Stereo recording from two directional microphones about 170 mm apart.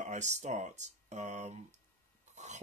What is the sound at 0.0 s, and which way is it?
Speech, 45° right (ahead or behind).